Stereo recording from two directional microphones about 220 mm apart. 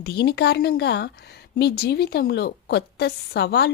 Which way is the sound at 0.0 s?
45° left (ahead or behind).